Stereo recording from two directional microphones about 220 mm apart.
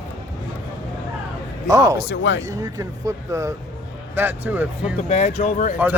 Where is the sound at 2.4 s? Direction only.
15° right (ahead or behind).